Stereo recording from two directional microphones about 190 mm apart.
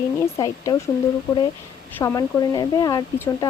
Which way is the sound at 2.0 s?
15° left (ahead or behind).